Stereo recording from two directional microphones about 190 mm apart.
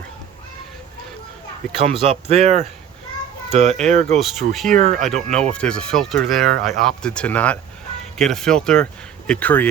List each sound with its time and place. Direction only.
1.8 s speech: 30° right (ahead or behind)
4.2 s speech: centre (ahead or behind)
4.7 s speech: 40° right (ahead or behind)
5.3 s speech: 5° left (ahead or behind)